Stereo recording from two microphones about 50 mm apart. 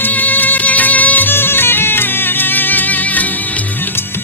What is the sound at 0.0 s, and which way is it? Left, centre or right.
Music, left.